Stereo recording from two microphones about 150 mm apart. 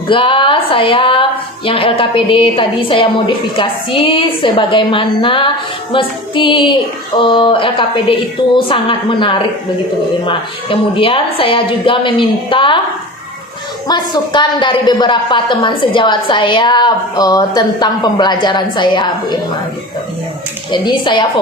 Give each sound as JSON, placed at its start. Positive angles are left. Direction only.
{"t": 0.1, "sound": "a woman's voice", "side_deg": 35}
{"t": 13.8, "sound": "a woman's voice", "side_deg": 30}
{"t": 20.7, "sound": "a woman's voice", "side_deg": 30}